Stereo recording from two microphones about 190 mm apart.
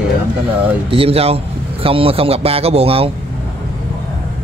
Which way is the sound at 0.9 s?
30° right (ahead or behind).